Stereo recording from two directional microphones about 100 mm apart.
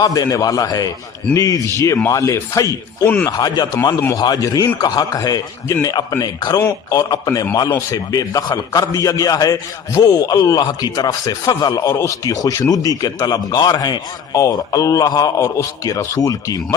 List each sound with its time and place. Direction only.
0.0 s a man's voice: 35° left (ahead or behind)